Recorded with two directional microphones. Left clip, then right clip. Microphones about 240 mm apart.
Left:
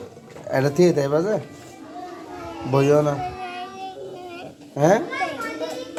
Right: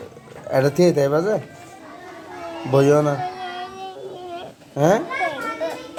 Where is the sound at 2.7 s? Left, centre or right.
Centre.